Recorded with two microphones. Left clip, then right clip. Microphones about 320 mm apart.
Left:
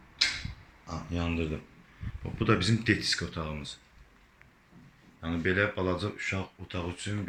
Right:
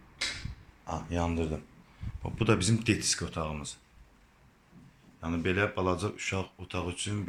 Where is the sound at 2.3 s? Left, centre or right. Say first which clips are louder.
Left 1 dB; centre.